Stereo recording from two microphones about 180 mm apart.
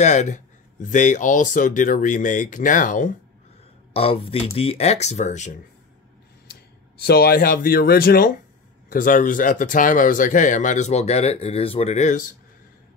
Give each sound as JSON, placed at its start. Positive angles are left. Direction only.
{"t": 0.0, "sound": "speech", "side_deg": 40}
{"t": 3.9, "sound": "speech", "side_deg": 30}
{"t": 6.5, "sound": "speech", "side_deg": 60}
{"t": 8.9, "sound": "speech", "side_deg": 50}